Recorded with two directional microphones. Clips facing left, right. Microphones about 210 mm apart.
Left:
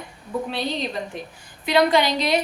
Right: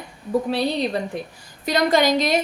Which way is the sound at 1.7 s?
45° right (ahead or behind).